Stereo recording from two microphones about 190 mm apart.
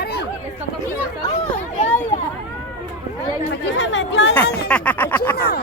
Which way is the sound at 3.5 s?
70° left (ahead or behind).